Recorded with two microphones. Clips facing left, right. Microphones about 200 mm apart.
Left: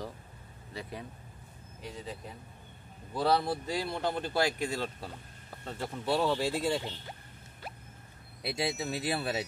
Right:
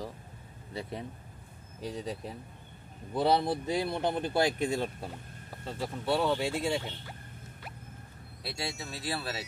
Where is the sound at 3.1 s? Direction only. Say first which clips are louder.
Right 2 dB; 20° right (ahead or behind).